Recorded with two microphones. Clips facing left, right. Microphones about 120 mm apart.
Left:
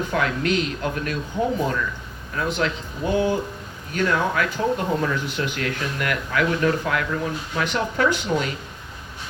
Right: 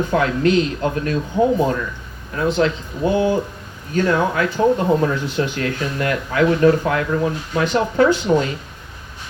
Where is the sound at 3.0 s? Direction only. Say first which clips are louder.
Right 4 dB; 35° right (ahead or behind).